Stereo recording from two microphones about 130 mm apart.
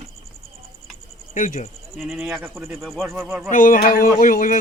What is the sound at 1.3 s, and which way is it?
Speech, 75° left (ahead or behind).